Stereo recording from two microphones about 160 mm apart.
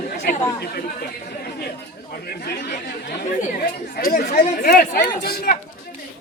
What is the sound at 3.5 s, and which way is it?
Speech, 65° left (ahead or behind).